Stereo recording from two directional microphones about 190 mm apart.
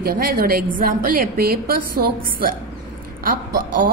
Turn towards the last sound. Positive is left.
turn(degrees=-45)  # may be behind; listen again after turning